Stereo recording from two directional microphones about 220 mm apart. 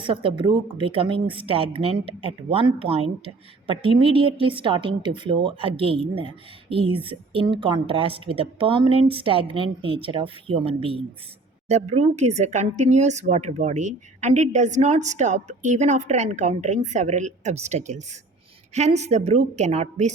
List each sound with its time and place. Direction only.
0.0 s speech: 25° right (ahead or behind)